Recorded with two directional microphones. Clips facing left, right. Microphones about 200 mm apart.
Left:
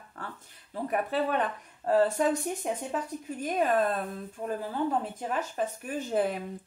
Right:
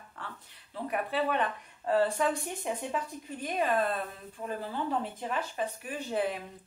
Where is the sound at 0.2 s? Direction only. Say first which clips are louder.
Left 3 dB; 45° left (ahead or behind).